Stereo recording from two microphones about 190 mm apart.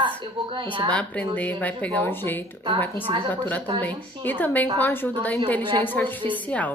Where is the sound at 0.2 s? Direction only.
25° right (ahead or behind).